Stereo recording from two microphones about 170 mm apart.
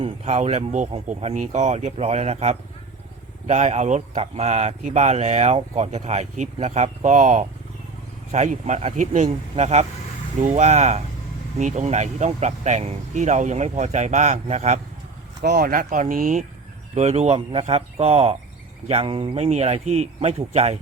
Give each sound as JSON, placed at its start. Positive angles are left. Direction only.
{"t": 0.0, "sound": "speech", "side_deg": -40}
{"t": 15.4, "sound": "speech", "side_deg": -60}